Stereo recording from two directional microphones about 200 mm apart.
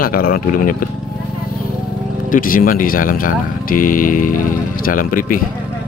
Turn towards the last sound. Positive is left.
turn(degrees=45)  # may be behind; listen again after turning